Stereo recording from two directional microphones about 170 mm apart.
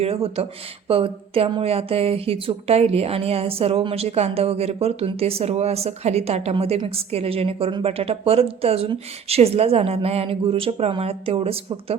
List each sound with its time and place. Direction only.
0.0 s speech: 35° right (ahead or behind)